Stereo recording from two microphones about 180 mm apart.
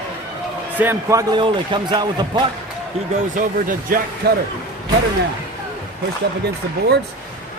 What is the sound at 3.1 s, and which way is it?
Speech, 45° right (ahead or behind).